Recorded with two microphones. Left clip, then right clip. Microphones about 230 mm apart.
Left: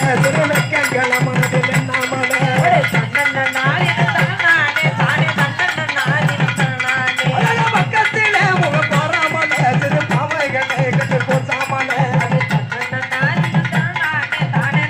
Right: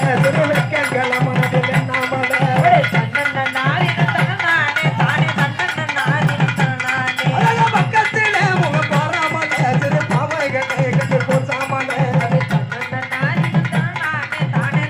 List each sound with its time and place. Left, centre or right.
0.0 s music: left
7.3 s music: left